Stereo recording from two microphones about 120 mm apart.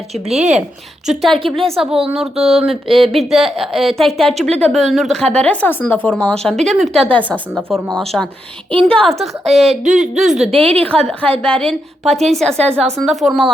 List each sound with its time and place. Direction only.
0.3 s speech: 70° right (ahead or behind)
1.0 s speech: centre (ahead or behind)
10.5 s speech: 55° right (ahead or behind)
10.9 s speech: 10° left (ahead or behind)